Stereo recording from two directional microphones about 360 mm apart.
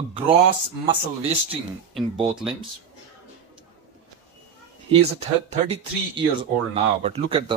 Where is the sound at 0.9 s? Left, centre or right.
Centre.